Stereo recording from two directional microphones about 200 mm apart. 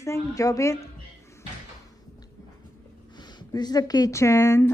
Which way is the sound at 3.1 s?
20° left (ahead or behind).